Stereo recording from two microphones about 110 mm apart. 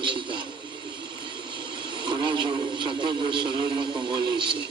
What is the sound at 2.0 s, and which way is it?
Speech, 45° right (ahead or behind).